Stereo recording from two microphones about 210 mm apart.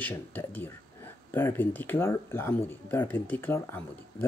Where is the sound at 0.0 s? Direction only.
10° left (ahead or behind).